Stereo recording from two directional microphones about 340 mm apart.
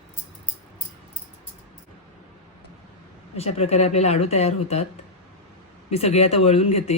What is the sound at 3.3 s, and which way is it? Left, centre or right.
Speech, centre.